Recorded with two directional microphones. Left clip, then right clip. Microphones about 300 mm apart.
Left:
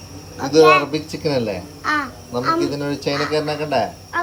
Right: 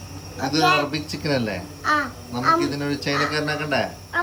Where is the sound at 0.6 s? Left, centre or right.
Centre.